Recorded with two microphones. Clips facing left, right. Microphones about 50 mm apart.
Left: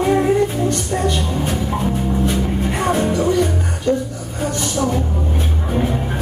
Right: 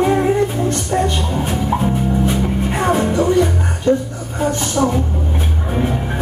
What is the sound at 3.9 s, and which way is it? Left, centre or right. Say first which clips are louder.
Speech: right 3 dB; right.